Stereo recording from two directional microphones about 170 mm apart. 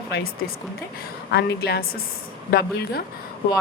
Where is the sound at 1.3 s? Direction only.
75° left (ahead or behind).